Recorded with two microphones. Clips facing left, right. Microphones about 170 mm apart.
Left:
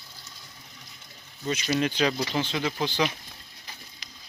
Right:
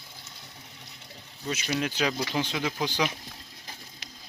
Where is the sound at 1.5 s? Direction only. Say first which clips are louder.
Left 4 dB; 5° right (ahead or behind).